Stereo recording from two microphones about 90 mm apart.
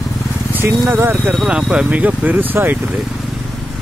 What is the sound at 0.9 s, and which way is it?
Speech, 25° right (ahead or behind).